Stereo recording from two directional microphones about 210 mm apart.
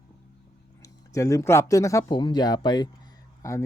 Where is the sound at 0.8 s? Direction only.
15° left (ahead or behind).